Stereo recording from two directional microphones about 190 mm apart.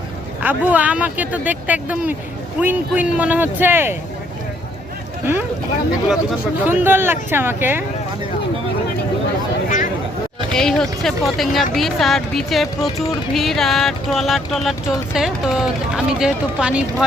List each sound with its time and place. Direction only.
0.4 s speech: 10° right (ahead or behind)
5.2 s speech: 10° right (ahead or behind)
6.7 s speech: 10° right (ahead or behind)
9.6 s a sound: 40° left (ahead or behind)
10.5 s speech: 5° left (ahead or behind)